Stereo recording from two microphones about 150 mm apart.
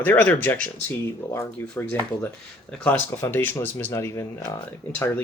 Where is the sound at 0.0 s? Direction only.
10° left (ahead or behind).